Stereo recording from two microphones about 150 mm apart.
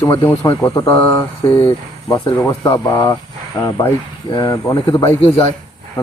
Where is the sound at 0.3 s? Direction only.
20° left (ahead or behind).